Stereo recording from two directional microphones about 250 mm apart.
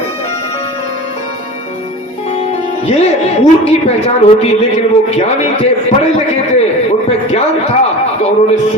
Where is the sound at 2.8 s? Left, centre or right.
Left.